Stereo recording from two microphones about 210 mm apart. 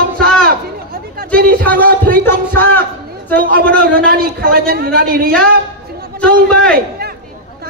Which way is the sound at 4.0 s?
45° right (ahead or behind).